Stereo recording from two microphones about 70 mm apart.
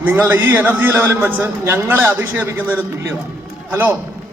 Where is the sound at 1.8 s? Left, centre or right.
Right.